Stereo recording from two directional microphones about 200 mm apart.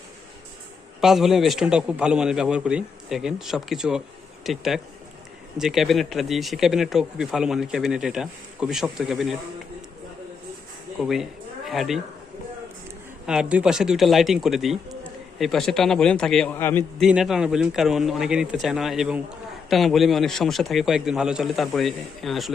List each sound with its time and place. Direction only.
1.0 s speech: centre (ahead or behind)
11.0 s speech: centre (ahead or behind)
13.2 s speech: 5° right (ahead or behind)
17.0 s speech: centre (ahead or behind)